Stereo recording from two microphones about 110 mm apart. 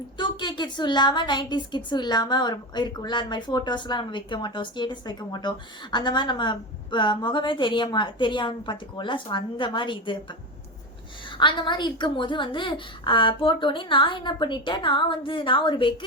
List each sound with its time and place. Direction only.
0.2 s a woman's voice: 45° left (ahead or behind)